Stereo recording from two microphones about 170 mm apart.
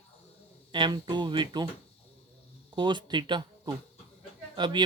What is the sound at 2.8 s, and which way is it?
Speech, 25° right (ahead or behind).